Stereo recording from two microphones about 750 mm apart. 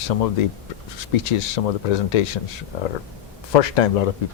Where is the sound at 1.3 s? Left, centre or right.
Left.